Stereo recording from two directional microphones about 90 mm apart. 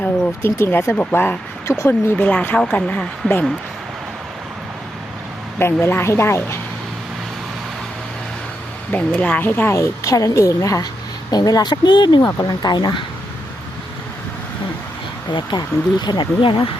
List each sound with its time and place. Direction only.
0.0 s a sound: 20° left (ahead or behind)
0.6 s a woman's voice: 30° left (ahead or behind)
1.6 s speech: 30° left (ahead or behind)
1.9 s a woman's voice: 20° left (ahead or behind)
5.5 s a woman's voice: 25° left (ahead or behind)
8.9 s a woman's voice: 15° left (ahead or behind); by 12.9 s 50° left (ahead or behind)
15.3 s speech: 55° left (ahead or behind)